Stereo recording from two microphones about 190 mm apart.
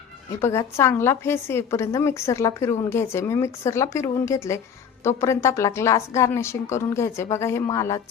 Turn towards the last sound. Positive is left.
turn(degrees=15)  # may be behind; listen again after turning